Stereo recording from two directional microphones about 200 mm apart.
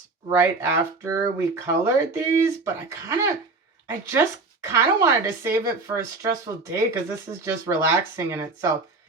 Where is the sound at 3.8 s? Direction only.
15° right (ahead or behind).